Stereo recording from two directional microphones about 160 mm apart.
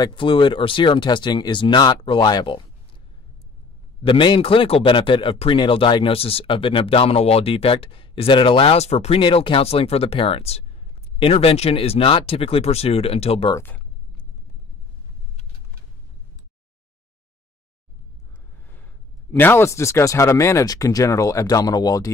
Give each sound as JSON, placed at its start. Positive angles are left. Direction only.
{"t": 0.0, "sound": "speech", "side_deg": 30}
{"t": 4.0, "sound": "speech", "side_deg": 30}
{"t": 13.6, "sound": "speech", "side_deg": 10}
{"t": 19.3, "sound": "speech", "side_deg": 15}